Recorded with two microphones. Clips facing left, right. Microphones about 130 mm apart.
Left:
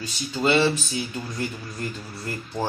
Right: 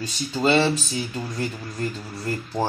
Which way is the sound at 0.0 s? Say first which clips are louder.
Right 2 dB; 35° right (ahead or behind).